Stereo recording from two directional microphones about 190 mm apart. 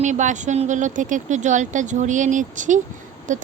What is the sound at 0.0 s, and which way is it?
Speech, 40° right (ahead or behind).